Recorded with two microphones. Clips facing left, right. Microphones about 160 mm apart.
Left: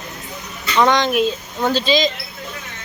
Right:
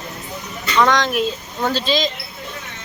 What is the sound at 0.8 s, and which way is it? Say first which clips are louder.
Speech: left 2 dB; 20° left (ahead or behind).